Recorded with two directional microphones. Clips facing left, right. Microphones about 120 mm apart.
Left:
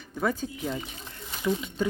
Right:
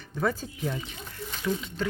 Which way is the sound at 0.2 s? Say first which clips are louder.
Even; 5° left (ahead or behind).